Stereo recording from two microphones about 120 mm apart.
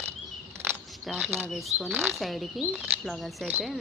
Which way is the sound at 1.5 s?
Centre (ahead or behind).